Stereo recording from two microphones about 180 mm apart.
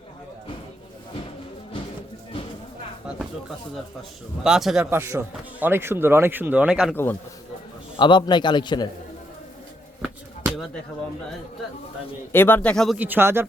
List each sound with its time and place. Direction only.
4.4 s speech: 5° right (ahead or behind)
4.9 s speech: 15° right (ahead or behind)
6.9 s speech: 10° left (ahead or behind)
7.9 s a man's voice: 25° left (ahead or behind)
12.3 s speech: 10° left (ahead or behind)
13.0 s speech: 10° right (ahead or behind)